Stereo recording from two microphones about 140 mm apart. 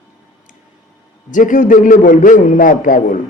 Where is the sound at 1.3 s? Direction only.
65° left (ahead or behind).